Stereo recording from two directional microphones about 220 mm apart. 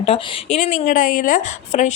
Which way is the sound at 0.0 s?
30° left (ahead or behind).